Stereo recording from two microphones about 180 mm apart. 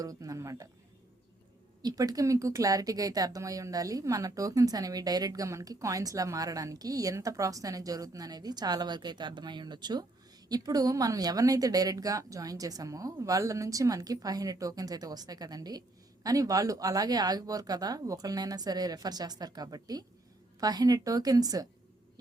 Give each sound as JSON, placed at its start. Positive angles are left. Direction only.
{"t": 0.0, "sound": "speech", "side_deg": -20}
{"t": 1.8, "sound": "speech", "side_deg": -20}